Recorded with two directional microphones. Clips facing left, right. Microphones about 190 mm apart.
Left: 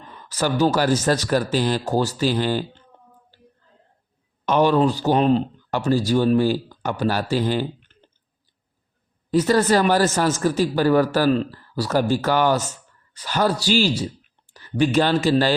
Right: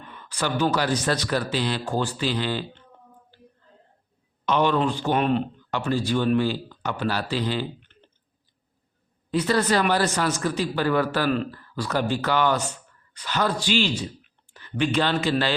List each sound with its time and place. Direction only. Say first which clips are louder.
0.0 s a man's voice: left 4 dB; 35° left (ahead or behind)
4.4 s speech: left 4 dB; 40° left (ahead or behind)
9.3 s a man's voice: left 5 dB; 45° left (ahead or behind)